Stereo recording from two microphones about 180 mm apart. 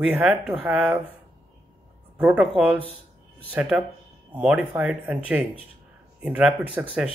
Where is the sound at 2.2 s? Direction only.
5° right (ahead or behind).